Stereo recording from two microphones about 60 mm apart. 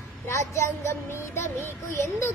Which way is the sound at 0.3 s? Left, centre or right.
Left.